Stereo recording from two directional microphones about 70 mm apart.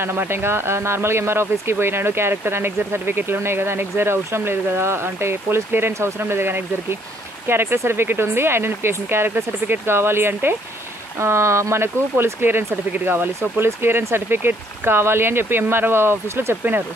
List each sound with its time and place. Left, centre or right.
0.0 s speech: right